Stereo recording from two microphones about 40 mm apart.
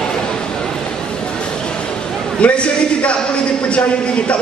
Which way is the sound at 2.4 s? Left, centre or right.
Left.